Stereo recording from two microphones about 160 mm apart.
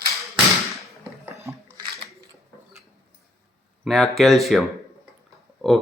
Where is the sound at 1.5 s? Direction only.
20° right (ahead or behind).